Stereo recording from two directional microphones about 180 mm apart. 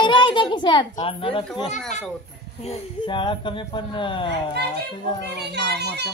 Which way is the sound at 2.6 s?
30° left (ahead or behind).